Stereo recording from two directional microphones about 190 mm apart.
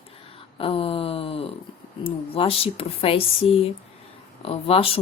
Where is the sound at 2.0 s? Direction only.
30° left (ahead or behind).